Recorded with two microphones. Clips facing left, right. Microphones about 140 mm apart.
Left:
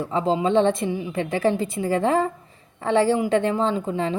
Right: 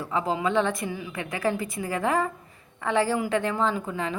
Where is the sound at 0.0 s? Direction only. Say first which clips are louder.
Left 5 dB; 30° left (ahead or behind).